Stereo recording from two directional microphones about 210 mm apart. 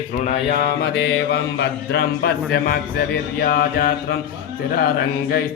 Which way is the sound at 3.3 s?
45° left (ahead or behind).